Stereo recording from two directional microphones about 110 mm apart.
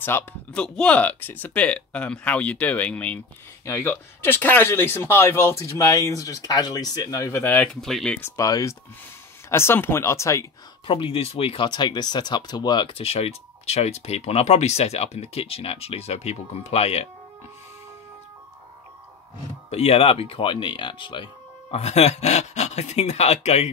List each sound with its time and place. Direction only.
0.0 s speech: 15° left (ahead or behind)
3.6 s speech: 25° left (ahead or behind)
7.5 s speech: 5° left (ahead or behind)
8.2 s speech: 30° left (ahead or behind)
10.9 s speech: 55° left (ahead or behind); by 17.1 s 70° left (ahead or behind)
19.7 s speech: 70° left (ahead or behind)